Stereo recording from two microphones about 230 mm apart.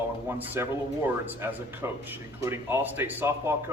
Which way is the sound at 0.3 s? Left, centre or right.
Centre.